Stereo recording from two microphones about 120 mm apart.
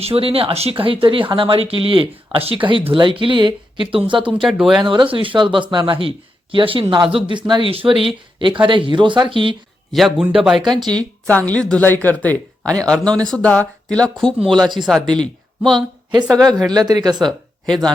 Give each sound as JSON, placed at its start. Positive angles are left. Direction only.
{"t": 0.0, "sound": "speech", "side_deg": -55}
{"t": 4.4, "sound": "a man's voice", "side_deg": -5}
{"t": 4.9, "sound": "speech", "side_deg": -45}
{"t": 9.9, "sound": "a man's voice", "side_deg": 0}
{"t": 11.3, "sound": "a man's voice", "side_deg": 10}
{"t": 16.3, "sound": "speech", "side_deg": -30}